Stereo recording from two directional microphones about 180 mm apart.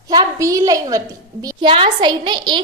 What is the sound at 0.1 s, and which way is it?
A woman's voice, 20° right (ahead or behind).